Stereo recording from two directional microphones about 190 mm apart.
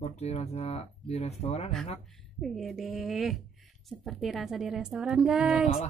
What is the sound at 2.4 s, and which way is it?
A woman's voice, centre (ahead or behind).